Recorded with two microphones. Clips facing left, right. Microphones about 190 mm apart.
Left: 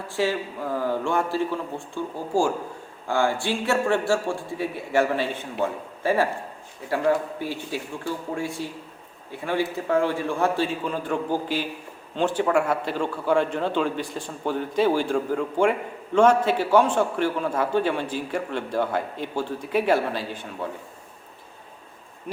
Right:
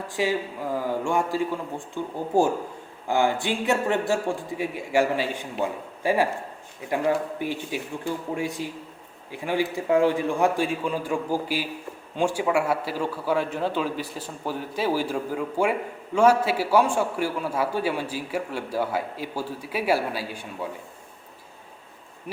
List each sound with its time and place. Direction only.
0.1 s a man's voice: 15° right (ahead or behind)